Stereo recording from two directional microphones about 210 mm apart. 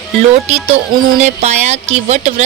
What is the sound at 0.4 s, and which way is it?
Speech, 30° right (ahead or behind).